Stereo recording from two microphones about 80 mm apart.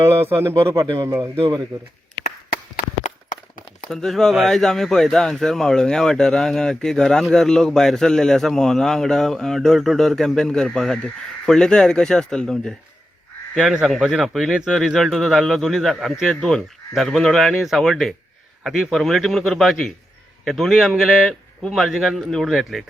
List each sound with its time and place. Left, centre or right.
0.0 s a man's voice: right
1.0 s speech: right
1.7 s speech: right
3.8 s speech: centre
13.6 s speech: centre